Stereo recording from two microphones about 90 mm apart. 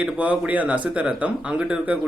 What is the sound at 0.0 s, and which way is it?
Speech, 15° right (ahead or behind).